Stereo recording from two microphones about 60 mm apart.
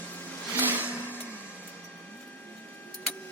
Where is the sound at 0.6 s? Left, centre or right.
Right.